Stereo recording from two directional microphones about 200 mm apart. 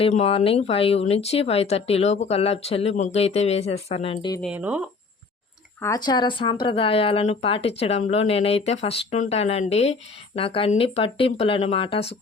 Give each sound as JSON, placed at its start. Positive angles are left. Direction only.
{"t": 0.0, "sound": "speech", "side_deg": 30}
{"t": 4.4, "sound": "speech", "side_deg": -5}
{"t": 5.8, "sound": "speech", "side_deg": 20}